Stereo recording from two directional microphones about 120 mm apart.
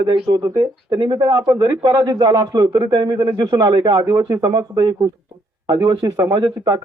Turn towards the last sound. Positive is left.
turn(degrees=-35)  # may be behind; listen again after turning